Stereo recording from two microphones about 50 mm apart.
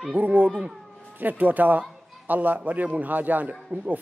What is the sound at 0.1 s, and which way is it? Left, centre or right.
Speech, right.